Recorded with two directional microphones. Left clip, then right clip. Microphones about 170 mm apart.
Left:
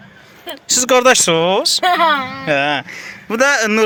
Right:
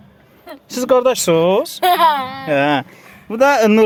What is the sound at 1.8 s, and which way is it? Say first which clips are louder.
Speech: right 2 dB; 40° right (ahead or behind).